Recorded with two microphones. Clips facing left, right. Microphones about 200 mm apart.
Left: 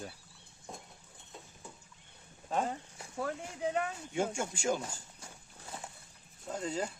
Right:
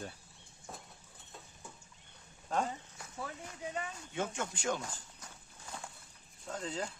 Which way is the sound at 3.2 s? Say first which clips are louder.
Left 7 dB; 65° left (ahead or behind).